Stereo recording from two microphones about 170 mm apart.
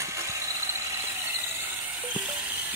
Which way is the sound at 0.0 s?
15° right (ahead or behind).